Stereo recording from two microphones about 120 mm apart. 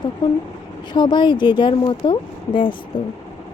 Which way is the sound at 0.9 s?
40° left (ahead or behind).